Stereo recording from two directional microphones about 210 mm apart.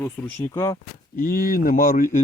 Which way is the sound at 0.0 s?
10° left (ahead or behind).